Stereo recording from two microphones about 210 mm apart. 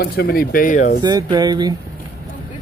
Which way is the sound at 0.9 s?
20° right (ahead or behind).